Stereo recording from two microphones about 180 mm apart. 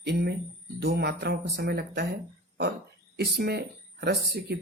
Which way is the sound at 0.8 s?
60° right (ahead or behind).